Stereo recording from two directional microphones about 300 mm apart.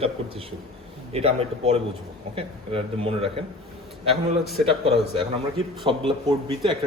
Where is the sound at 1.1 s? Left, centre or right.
Centre.